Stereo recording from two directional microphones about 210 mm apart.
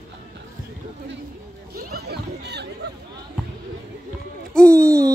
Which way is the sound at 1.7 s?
50° right (ahead or behind).